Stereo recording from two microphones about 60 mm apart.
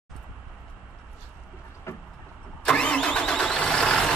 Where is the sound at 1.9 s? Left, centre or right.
Left.